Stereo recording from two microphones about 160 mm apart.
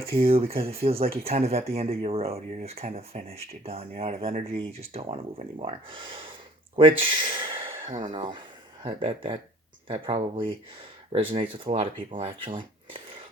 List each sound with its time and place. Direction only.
0.0 s speech: 35° right (ahead or behind)
7.9 s speech: 50° right (ahead or behind)
8.1 s speech: 30° right (ahead or behind)